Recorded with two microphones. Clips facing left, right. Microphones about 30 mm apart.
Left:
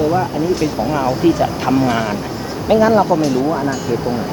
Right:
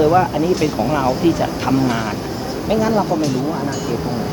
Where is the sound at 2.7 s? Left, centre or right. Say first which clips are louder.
Left 5 dB; left.